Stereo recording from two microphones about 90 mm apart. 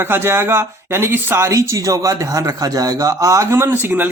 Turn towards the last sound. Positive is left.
turn(degrees=-25)  # may be behind; listen again after turning